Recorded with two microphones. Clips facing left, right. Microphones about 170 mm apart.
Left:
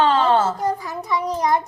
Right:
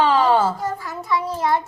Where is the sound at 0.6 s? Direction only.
20° left (ahead or behind).